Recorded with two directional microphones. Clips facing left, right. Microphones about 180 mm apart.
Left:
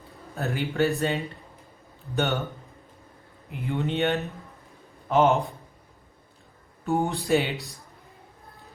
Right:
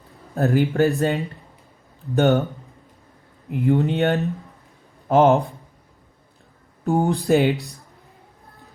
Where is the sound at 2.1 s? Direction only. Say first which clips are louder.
Right 9 dB; 40° right (ahead or behind).